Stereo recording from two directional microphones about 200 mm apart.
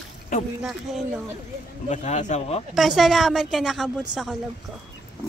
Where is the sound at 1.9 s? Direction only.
35° left (ahead or behind).